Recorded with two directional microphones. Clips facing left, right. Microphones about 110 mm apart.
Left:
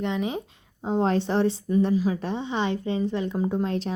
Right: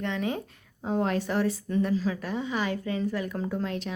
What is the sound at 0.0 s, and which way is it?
Speech, 20° left (ahead or behind).